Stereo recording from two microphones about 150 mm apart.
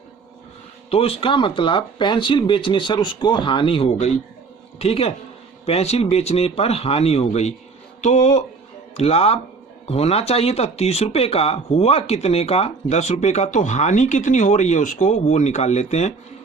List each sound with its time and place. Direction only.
0.9 s speech: 40° left (ahead or behind)